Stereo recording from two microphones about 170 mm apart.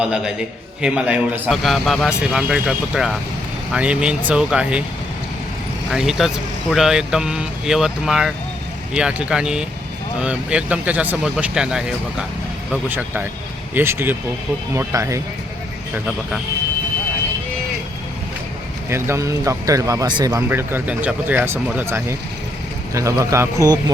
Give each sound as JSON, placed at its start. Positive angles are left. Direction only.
{"t": 0.0, "sound": "a man's voice", "side_deg": -5}
{"t": 5.9, "sound": "a man's voice", "side_deg": -5}
{"t": 18.9, "sound": "speech", "side_deg": -15}